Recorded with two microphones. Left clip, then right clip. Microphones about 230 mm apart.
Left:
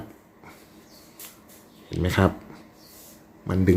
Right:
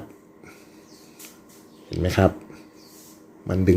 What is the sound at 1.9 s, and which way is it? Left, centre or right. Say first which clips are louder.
Speech: right 2 dB; centre.